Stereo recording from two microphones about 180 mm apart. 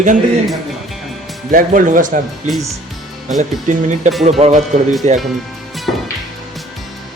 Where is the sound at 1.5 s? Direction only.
45° right (ahead or behind).